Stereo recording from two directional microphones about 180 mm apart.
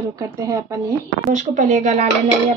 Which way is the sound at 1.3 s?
45° right (ahead or behind).